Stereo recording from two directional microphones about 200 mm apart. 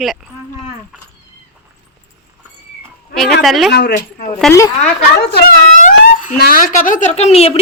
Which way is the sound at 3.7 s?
55° left (ahead or behind).